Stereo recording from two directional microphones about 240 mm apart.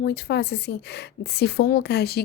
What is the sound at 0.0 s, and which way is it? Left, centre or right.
Speech, left.